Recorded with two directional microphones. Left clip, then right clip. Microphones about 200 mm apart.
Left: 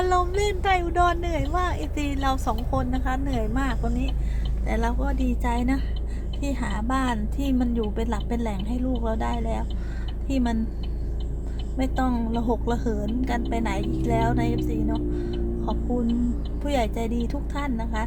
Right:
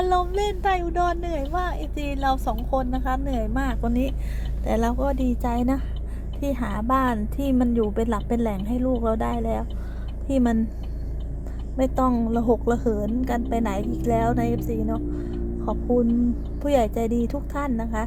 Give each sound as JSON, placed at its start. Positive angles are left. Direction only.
{"t": 0.0, "sound": "speech", "side_deg": -10}
{"t": 4.6, "sound": "a woman's voice", "side_deg": -35}
{"t": 11.8, "sound": "a woman's voice", "side_deg": -30}
{"t": 16.6, "sound": "a woman's voice", "side_deg": -30}